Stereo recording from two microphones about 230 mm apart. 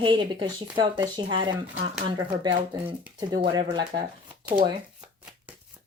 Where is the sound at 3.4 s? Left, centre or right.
Centre.